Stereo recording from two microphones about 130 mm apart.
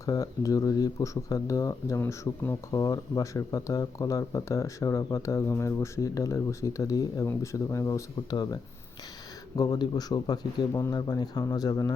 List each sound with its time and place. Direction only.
0.0 s speech: 25° left (ahead or behind)
2.7 s speech: 30° left (ahead or behind)
9.6 s speech: 30° left (ahead or behind)